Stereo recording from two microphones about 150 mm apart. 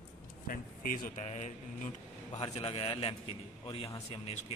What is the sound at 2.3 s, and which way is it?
A man's voice, 35° left (ahead or behind).